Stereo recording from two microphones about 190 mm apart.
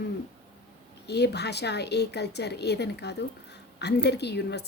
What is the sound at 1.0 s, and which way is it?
A woman's voice, 60° left (ahead or behind).